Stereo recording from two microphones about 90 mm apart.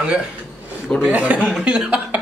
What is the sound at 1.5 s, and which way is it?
Cough, 5° right (ahead or behind).